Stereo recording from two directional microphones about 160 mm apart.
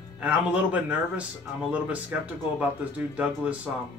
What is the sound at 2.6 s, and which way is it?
Speech, 10° right (ahead or behind).